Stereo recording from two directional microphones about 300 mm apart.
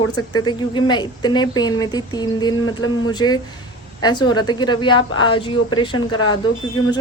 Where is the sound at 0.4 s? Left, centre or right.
Centre.